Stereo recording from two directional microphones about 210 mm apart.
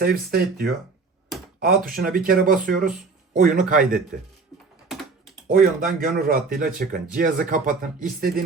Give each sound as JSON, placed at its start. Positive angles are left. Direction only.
{"t": 0.0, "sound": "speech", "side_deg": -45}
{"t": 5.5, "sound": "speech", "side_deg": -40}